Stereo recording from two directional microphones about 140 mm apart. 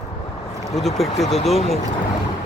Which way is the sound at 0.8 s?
Centre (ahead or behind).